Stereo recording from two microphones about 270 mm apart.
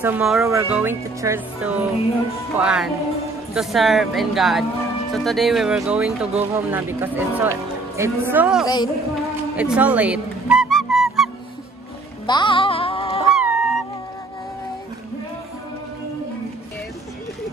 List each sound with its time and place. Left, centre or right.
0.0 s speech: centre
8.6 s a sound: centre
9.6 s music: centre
12.3 s music: centre
13.3 s honk: centre